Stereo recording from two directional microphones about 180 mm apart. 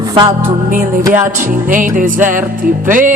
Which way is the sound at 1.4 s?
45° right (ahead or behind).